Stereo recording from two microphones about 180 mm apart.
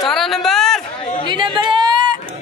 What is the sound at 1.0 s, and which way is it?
Chatter, 30° left (ahead or behind).